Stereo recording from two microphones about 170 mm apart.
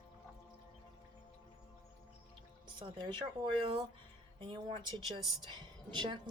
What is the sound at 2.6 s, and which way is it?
A woman's voice, 30° right (ahead or behind).